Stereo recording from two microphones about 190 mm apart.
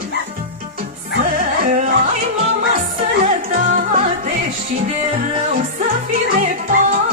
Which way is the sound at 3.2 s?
45° right (ahead or behind).